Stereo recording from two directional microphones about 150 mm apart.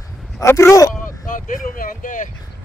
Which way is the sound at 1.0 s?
65° left (ahead or behind).